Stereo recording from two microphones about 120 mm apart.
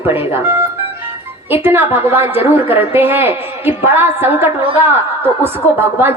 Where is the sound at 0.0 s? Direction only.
20° right (ahead or behind).